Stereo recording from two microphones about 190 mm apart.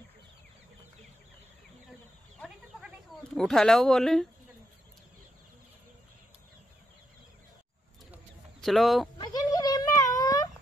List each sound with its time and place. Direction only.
3.3 s speech: 5° left (ahead or behind)
8.1 s chicken: centre (ahead or behind)
9.2 s a sound: 20° left (ahead or behind)